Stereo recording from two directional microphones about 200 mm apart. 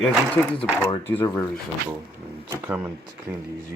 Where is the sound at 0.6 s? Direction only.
10° left (ahead or behind).